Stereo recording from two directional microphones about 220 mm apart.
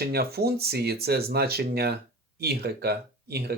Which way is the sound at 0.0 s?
45° right (ahead or behind).